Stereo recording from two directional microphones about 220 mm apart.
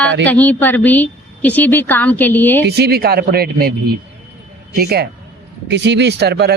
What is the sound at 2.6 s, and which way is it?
Speech, 45° right (ahead or behind).